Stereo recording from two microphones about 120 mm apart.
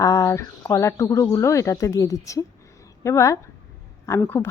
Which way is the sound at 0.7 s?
25° left (ahead or behind).